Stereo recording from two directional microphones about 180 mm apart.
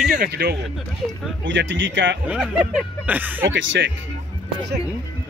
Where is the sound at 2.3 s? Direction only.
5° right (ahead or behind).